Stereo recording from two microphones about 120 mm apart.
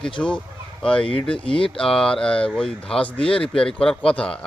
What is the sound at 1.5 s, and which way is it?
Speech, 50° left (ahead or behind).